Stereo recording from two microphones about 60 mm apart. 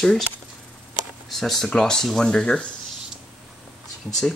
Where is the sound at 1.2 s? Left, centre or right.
Centre.